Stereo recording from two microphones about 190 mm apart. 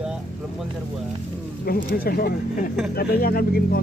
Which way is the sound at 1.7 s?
50° left (ahead or behind).